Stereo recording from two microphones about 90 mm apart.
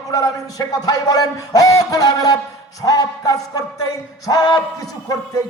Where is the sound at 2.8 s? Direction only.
45° left (ahead or behind).